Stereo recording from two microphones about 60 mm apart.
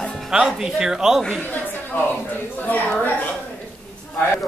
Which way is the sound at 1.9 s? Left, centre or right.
Left.